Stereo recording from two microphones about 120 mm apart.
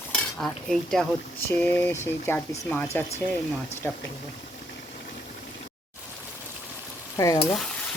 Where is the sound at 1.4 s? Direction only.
15° left (ahead or behind).